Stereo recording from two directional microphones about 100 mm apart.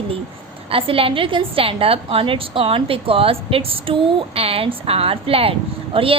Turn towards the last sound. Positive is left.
turn(degrees=-65)  # may be behind; listen again after turning